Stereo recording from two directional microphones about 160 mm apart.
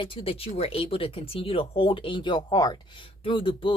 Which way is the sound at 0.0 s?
35° left (ahead or behind).